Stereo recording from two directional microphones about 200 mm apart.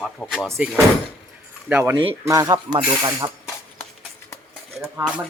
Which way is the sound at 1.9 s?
25° right (ahead or behind).